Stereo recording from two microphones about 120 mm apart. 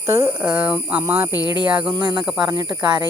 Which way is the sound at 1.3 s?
35° left (ahead or behind).